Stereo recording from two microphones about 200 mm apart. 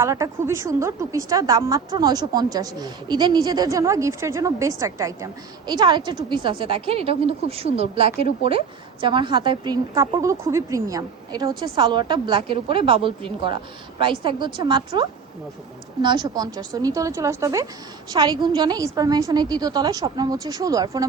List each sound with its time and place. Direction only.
0.0 s a woman's voice: 15° right (ahead or behind)